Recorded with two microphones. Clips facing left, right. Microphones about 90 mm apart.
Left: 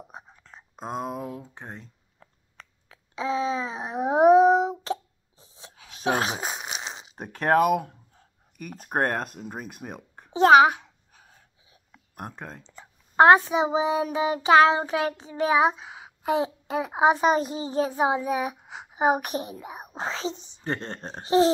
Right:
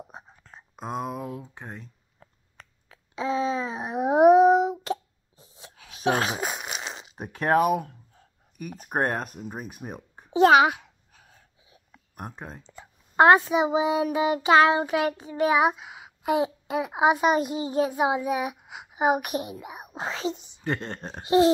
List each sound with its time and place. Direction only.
0.7 s a child's voice: 40° left (ahead or behind)
1.5 s child singing: 30° left (ahead or behind)
3.2 s a sound: 20° left (ahead or behind)
7.3 s speech: 40° left (ahead or behind)
10.3 s a sound: 30° left (ahead or behind)
12.2 s speech: 45° left (ahead or behind)
13.1 s child singing: 25° left (ahead or behind)
17.5 s a child's voice: 30° left (ahead or behind)
19.9 s child singing: 25° left (ahead or behind)